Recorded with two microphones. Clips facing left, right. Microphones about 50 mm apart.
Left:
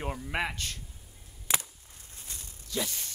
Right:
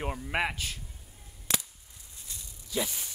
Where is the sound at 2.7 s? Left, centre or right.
Centre.